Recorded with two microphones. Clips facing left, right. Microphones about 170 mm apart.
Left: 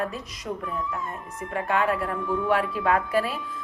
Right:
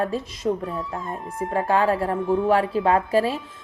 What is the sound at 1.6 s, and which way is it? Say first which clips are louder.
A woman's voice: right 4 dB; 30° right (ahead or behind).